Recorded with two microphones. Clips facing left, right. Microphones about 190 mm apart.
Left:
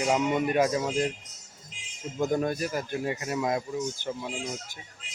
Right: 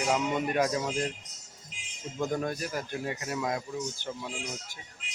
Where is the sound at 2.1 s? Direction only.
20° left (ahead or behind).